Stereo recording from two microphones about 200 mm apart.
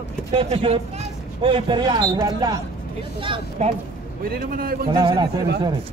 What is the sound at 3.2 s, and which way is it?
Speech, 30° right (ahead or behind).